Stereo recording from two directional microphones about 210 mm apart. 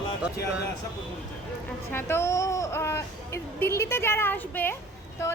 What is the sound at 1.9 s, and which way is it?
A woman's voice, 10° left (ahead or behind).